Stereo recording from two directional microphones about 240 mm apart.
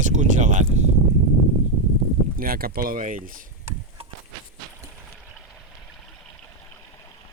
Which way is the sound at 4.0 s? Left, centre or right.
Right.